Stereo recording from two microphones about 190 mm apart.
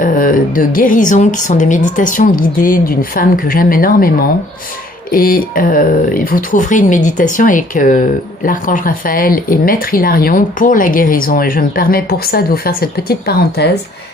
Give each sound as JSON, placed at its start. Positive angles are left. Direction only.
{"t": 0.0, "sound": "speech", "side_deg": 45}
{"t": 5.1, "sound": "speech", "side_deg": 50}